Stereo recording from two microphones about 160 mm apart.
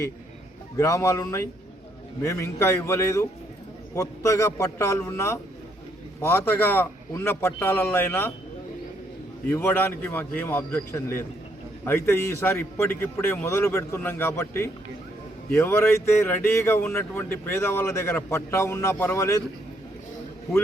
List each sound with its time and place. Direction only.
0.8 s a man's voice: 20° left (ahead or behind)
9.5 s a man's voice: 15° left (ahead or behind)